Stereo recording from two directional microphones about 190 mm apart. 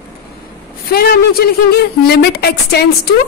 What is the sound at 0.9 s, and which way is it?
Speech, 55° left (ahead or behind).